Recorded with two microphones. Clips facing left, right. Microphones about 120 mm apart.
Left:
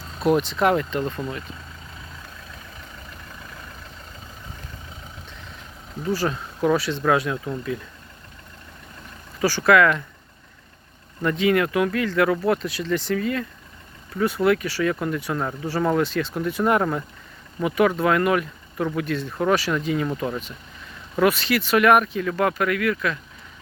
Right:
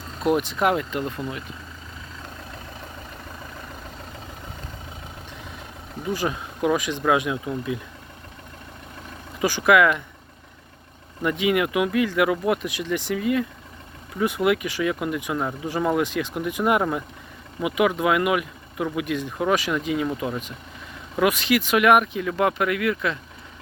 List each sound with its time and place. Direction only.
0.2 s speech: 15° right (ahead or behind)
6.0 s speech: 15° right (ahead or behind)
9.4 s speech: 15° right (ahead or behind)
11.2 s speech: 15° right (ahead or behind)